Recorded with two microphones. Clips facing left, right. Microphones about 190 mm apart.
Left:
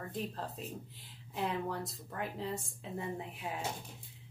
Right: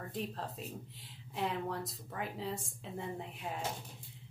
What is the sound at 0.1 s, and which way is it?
Speech, centre (ahead or behind).